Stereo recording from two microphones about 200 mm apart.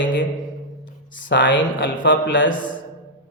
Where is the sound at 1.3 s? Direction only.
65° left (ahead or behind).